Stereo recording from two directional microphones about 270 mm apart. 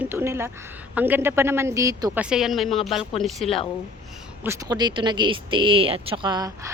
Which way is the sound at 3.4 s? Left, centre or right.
Centre.